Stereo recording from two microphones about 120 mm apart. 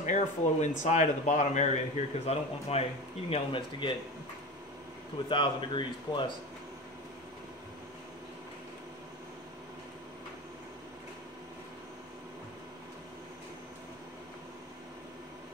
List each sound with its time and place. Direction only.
0.0 s speech: 90° left; by 3.9 s 50° left (ahead or behind)
5.3 s speech: 45° left (ahead or behind)